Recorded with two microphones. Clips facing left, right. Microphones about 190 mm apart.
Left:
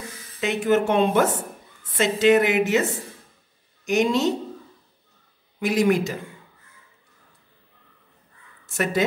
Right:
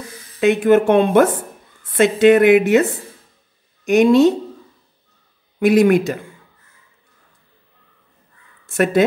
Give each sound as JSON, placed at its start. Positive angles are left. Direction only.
{"t": 0.4, "sound": "a woman's voice", "side_deg": -55}
{"t": 5.6, "sound": "a woman's voice", "side_deg": -55}
{"t": 8.6, "sound": "speech", "side_deg": -55}